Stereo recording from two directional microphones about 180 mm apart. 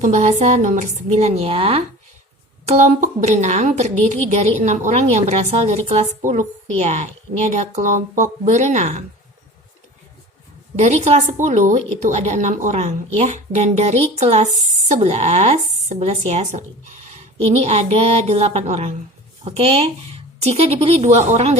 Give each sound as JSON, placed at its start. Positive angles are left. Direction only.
{"t": 0.0, "sound": "a woman's voice", "side_deg": -40}
{"t": 2.6, "sound": "a woman's voice", "side_deg": -45}
{"t": 10.8, "sound": "a woman's voice", "side_deg": -40}